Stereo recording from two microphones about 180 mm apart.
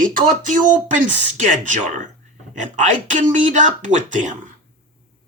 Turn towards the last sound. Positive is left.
turn(degrees=-45)  # may be behind; listen again after turning